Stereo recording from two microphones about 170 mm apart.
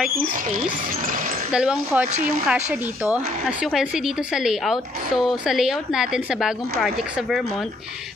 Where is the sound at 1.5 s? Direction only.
5° right (ahead or behind).